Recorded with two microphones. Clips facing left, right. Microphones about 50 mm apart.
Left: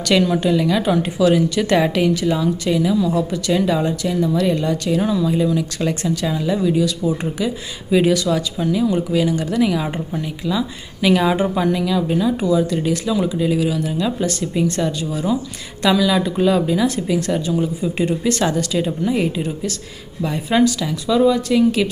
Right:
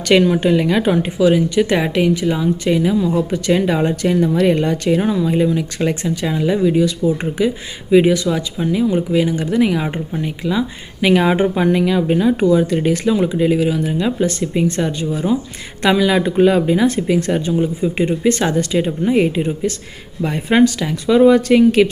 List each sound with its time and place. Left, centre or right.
0.1 s a woman's voice: right
7.9 s a woman's voice: centre; by 21.8 s right